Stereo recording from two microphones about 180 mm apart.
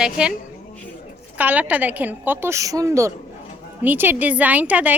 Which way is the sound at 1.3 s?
10° right (ahead or behind).